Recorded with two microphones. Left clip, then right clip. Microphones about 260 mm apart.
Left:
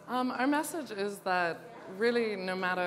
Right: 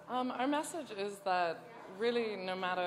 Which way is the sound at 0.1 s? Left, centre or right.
Left.